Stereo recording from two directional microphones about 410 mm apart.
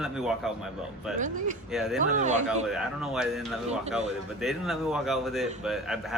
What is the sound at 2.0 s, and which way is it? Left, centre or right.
Speech, centre.